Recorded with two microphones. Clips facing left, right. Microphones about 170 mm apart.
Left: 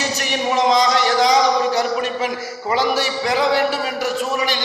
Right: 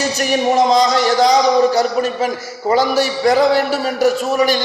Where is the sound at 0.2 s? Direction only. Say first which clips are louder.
Right 6 dB; 45° right (ahead or behind).